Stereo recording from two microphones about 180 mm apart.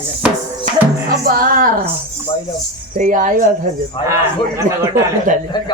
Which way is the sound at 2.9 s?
45° right (ahead or behind).